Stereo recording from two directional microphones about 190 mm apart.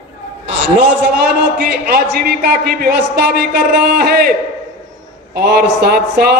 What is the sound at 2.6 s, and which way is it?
A man's voice, 60° right (ahead or behind).